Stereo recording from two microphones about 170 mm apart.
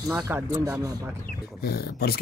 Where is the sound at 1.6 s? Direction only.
65° left (ahead or behind).